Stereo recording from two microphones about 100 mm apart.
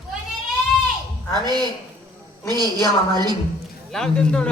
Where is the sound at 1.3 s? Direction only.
45° right (ahead or behind).